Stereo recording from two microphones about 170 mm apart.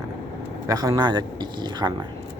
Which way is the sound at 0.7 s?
20° right (ahead or behind).